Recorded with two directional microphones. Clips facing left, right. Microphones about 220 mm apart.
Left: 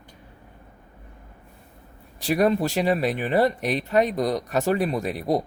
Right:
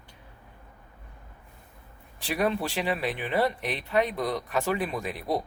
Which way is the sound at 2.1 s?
40° left (ahead or behind).